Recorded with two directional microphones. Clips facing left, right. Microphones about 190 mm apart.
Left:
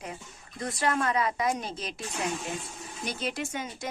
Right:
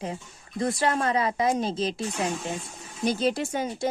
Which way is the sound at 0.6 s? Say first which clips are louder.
Right 4 dB; 30° right (ahead or behind).